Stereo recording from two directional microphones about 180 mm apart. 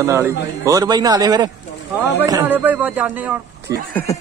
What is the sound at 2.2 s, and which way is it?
A man's voice, 10° right (ahead or behind).